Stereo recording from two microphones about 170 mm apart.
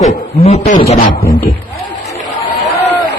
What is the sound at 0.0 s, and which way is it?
A man's voice, 40° left (ahead or behind).